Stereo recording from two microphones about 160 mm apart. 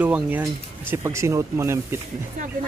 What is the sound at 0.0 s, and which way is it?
Speech, 10° right (ahead or behind).